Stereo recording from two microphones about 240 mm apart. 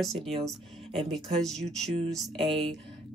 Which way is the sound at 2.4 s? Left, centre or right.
Right.